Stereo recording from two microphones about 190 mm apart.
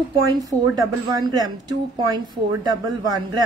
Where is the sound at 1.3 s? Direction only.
20° right (ahead or behind).